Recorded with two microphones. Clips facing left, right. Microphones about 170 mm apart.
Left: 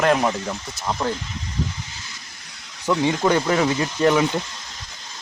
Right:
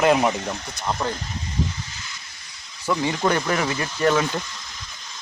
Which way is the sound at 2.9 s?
20° left (ahead or behind).